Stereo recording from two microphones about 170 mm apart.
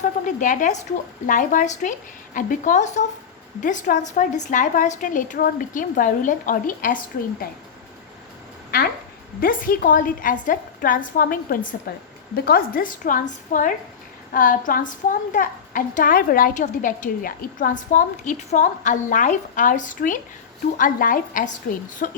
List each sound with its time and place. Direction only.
0.0 s a woman's voice: 50° left (ahead or behind)
9.4 s a woman's voice: 55° left (ahead or behind)